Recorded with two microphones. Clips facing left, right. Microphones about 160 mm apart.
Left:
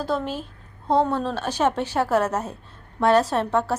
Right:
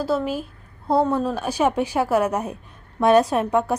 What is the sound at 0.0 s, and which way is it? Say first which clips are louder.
A woman's voice: right 3 dB; 5° right (ahead or behind).